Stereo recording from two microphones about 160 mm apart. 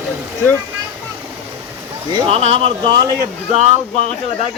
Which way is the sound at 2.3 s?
40° right (ahead or behind).